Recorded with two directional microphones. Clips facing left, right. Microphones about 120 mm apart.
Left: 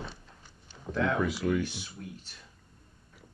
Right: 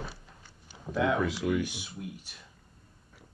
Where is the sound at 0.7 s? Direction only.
10° right (ahead or behind).